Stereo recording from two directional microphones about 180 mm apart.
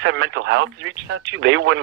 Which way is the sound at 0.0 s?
90° right.